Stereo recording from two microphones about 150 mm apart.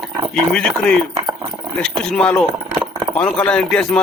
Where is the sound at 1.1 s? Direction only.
25° right (ahead or behind).